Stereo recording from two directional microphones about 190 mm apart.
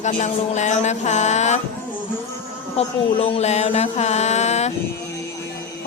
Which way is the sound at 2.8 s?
30° left (ahead or behind).